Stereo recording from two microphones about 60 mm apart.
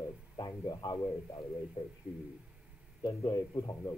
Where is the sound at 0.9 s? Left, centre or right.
Left.